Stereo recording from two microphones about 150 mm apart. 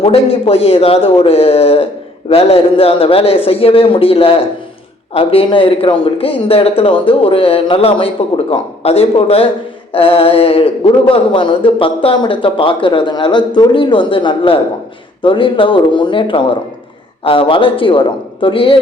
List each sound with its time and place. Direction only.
0.0 s speech: 40° left (ahead or behind)